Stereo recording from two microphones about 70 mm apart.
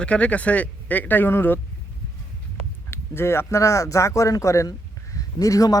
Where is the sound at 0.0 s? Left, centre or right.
Centre.